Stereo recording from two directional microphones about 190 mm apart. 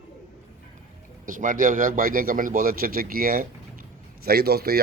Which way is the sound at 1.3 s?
45° right (ahead or behind).